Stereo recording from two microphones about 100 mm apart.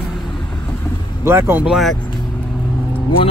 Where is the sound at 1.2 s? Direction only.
25° right (ahead or behind).